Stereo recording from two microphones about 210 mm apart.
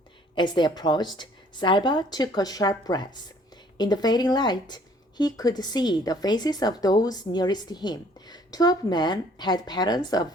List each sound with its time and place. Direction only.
0.3 s a woman's voice: 20° left (ahead or behind)